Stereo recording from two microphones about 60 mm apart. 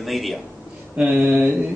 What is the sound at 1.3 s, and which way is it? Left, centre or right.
Mantra, right.